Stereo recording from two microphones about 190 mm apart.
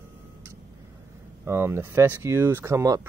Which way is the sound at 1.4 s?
15° right (ahead or behind).